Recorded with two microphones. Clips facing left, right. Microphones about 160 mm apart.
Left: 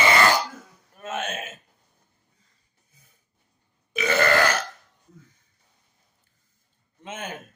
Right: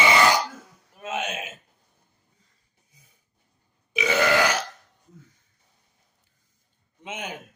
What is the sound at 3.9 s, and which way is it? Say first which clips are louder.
Burping: even; 10° right (ahead or behind).